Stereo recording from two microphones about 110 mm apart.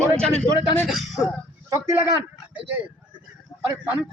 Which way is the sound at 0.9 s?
Centre (ahead or behind).